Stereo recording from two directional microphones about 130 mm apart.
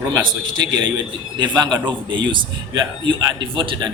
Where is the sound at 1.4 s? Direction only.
35° right (ahead or behind).